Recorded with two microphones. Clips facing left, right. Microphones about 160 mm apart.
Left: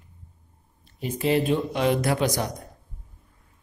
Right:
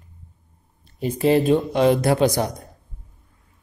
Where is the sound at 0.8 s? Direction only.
40° right (ahead or behind).